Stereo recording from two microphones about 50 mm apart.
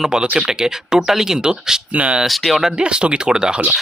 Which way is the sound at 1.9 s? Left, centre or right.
Right.